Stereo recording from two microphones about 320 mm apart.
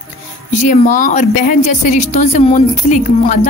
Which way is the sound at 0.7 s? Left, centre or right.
Left.